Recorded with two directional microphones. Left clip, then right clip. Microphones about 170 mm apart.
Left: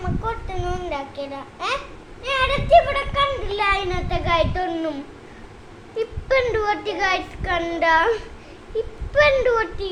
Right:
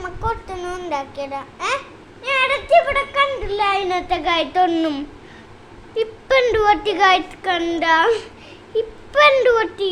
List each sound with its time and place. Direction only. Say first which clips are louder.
0.0 s a sound: right 3 dB; 40° right (ahead or behind)
2.2 s speech: right 3 dB; 35° right (ahead or behind); by 4.9 s 55° right (ahead or behind)
6.0 s a woman's voice: right 4 dB; 50° right (ahead or behind)